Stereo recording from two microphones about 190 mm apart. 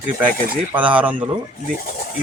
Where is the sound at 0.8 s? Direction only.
10° right (ahead or behind).